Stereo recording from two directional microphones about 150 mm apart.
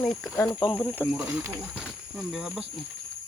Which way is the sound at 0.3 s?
25° left (ahead or behind).